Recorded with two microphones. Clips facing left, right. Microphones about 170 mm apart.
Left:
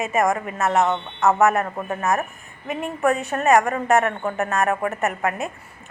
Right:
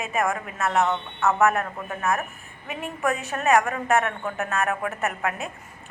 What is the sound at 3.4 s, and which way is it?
A woman's voice, centre (ahead or behind).